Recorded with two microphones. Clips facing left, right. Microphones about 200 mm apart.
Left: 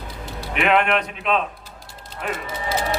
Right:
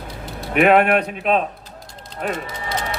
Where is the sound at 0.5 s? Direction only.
45° right (ahead or behind).